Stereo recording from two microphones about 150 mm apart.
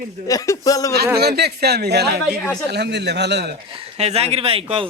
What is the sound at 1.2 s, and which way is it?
A man's voice, 90° right.